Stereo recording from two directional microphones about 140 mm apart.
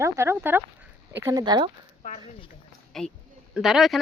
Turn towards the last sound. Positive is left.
turn(degrees=0)  # may be behind; listen again after turning